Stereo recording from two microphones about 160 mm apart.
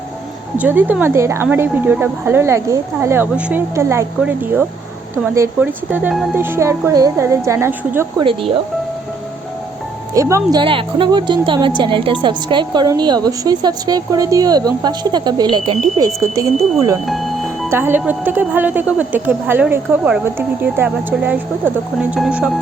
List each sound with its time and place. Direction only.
0.5 s speech: 10° right (ahead or behind)
8.2 s speech: 35° right (ahead or behind)
10.2 s speech: 20° right (ahead or behind)
10.6 s speech: 30° right (ahead or behind)
16.2 s speech: 20° right (ahead or behind)
17.1 s music: centre (ahead or behind)
17.7 s speech: 15° right (ahead or behind)